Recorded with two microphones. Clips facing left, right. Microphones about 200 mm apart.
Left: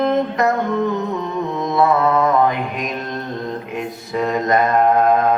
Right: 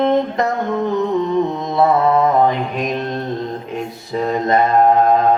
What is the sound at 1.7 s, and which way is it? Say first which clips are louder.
Mantra: right 2 dB; 30° right (ahead or behind).